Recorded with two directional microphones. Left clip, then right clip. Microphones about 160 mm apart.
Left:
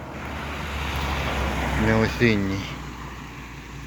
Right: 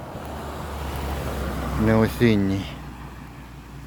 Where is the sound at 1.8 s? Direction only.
35° right (ahead or behind).